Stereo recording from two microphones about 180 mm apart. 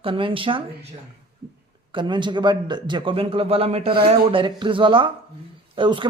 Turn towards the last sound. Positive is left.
turn(degrees=-25)  # may be behind; listen again after turning